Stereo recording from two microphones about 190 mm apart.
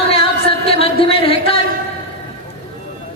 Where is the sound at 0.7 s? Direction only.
30° left (ahead or behind).